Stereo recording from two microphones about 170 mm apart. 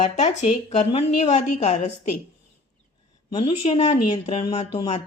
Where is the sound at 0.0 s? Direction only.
40° left (ahead or behind).